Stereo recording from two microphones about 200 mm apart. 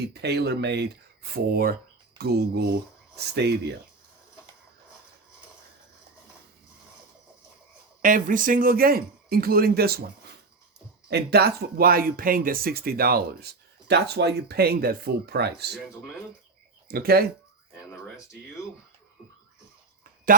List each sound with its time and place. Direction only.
0.1 s speech: 55° right (ahead or behind)
8.0 s speech: 40° right (ahead or behind)
16.9 s speech: 50° right (ahead or behind)